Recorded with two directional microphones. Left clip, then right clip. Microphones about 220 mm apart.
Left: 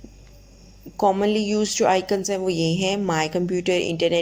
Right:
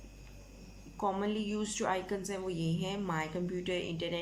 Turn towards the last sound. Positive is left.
turn(degrees=30)  # may be behind; listen again after turning